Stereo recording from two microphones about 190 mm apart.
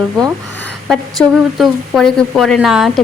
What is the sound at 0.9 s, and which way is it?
A woman's voice, centre (ahead or behind).